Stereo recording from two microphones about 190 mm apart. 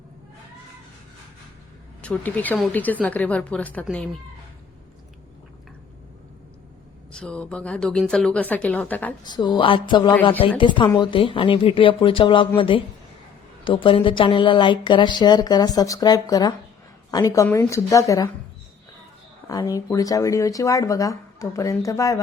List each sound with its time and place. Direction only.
2.0 s speech: 5° left (ahead or behind)
7.1 s a woman's voice: 5° left (ahead or behind)
9.2 s speech: 20° left (ahead or behind)
19.5 s speech: 20° left (ahead or behind)